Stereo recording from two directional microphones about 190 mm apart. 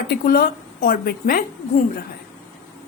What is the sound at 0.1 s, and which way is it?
A woman's voice, 50° left (ahead or behind).